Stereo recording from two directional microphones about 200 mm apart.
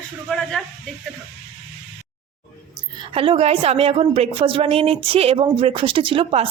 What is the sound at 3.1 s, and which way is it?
A woman's voice, 25° right (ahead or behind).